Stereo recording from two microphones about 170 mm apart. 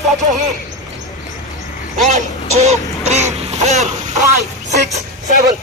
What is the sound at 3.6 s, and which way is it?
Speech, 40° right (ahead or behind).